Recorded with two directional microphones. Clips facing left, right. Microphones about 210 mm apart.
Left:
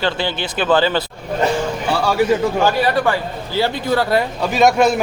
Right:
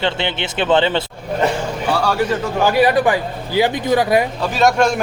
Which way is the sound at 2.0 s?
10° left (ahead or behind).